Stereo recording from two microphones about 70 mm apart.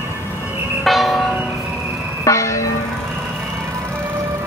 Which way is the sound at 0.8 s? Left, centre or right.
Centre.